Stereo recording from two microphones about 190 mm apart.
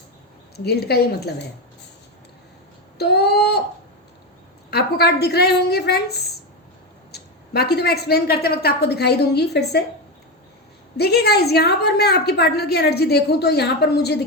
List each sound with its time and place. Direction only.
0.5 s a woman's voice: 55° left (ahead or behind)
3.0 s a woman's voice: 60° left (ahead or behind)
4.7 s a woman's voice: 55° left (ahead or behind)
7.1 s a woman's voice: 60° left (ahead or behind)
10.9 s a woman's voice: 60° left (ahead or behind)